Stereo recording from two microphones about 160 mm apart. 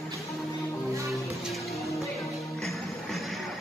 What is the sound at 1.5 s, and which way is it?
Music, centre (ahead or behind).